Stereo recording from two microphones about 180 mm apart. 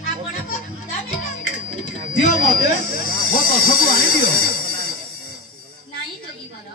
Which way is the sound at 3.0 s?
55° left (ahead or behind).